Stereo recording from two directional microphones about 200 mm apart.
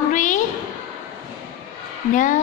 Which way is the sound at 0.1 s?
40° left (ahead or behind).